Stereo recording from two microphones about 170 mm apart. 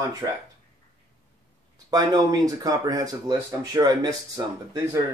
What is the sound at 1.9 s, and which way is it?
Speech, 25° right (ahead or behind).